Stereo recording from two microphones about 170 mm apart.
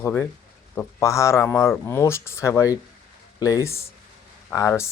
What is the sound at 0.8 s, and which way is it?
Speech, 15° left (ahead or behind).